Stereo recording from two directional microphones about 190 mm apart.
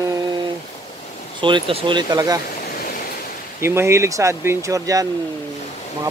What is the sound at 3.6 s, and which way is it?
Speech, 15° right (ahead or behind).